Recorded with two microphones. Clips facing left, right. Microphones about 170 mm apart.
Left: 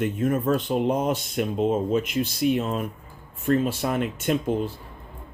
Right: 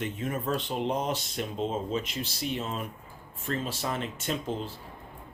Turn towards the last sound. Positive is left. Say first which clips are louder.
# left 8 dB
turn(degrees=55)  # may be behind; listen again after turning